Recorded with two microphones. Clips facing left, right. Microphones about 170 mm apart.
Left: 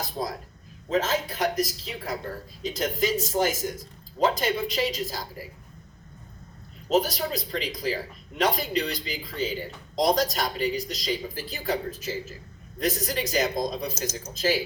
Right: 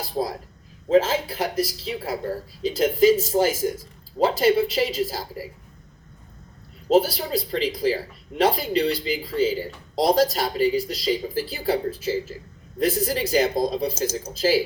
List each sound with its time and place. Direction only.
0.9 s speech: 30° right (ahead or behind)
6.8 s speech: 30° right (ahead or behind)